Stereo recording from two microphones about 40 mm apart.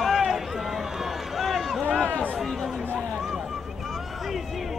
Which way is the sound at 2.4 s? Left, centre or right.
Centre.